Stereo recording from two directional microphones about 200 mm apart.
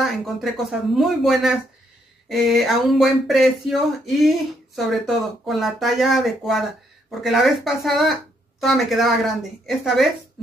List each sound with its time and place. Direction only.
0.0 s speech: centre (ahead or behind)